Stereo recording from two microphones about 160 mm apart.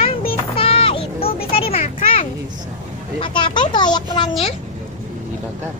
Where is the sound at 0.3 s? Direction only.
35° left (ahead or behind).